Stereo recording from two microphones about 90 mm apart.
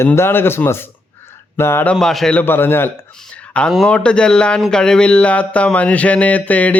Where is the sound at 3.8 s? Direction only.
10° left (ahead or behind).